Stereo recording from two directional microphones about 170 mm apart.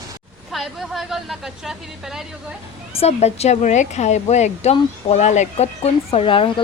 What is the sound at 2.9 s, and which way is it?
A woman's voice, 35° left (ahead or behind).